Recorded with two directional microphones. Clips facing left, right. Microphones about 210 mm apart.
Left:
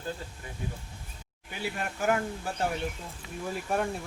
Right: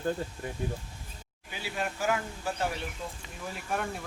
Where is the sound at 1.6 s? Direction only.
50° left (ahead or behind).